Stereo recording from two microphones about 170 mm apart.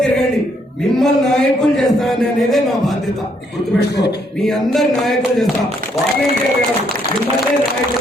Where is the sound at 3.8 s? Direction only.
75° left (ahead or behind).